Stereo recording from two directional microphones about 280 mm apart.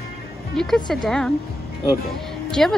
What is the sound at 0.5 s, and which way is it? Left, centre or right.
Speech, centre.